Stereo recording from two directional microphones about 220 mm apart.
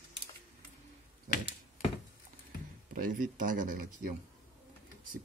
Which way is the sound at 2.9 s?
40° right (ahead or behind).